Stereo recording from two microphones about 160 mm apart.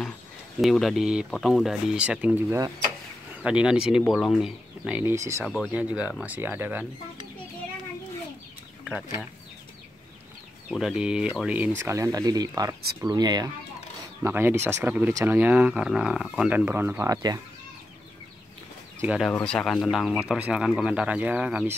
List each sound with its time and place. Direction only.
0.6 s speech: centre (ahead or behind); by 5.4 s 20° right (ahead or behind)
5.4 s speech: 5° right (ahead or behind)
10.7 s speech: 5° right (ahead or behind); by 13.5 s 25° right (ahead or behind)
14.2 s speech: 15° right (ahead or behind)
19.3 s speech: 5° left (ahead or behind)